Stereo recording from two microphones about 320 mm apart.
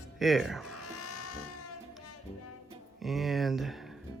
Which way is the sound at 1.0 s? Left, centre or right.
Left.